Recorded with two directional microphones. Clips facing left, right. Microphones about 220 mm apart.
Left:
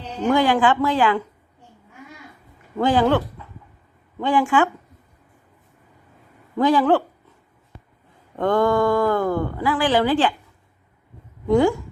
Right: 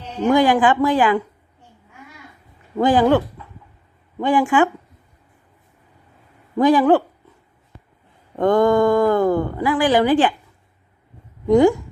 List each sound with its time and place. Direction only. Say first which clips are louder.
0.3 s speech: right 3 dB; 15° right (ahead or behind)
2.7 s speech: right 3 dB; 15° right (ahead or behind)
4.2 s speech: right 2 dB; 15° right (ahead or behind)
6.6 s speech: right 3 dB; 15° right (ahead or behind)
8.4 s speech: right 4 dB; 15° right (ahead or behind)
11.4 s speech: right 4 dB; 15° right (ahead or behind)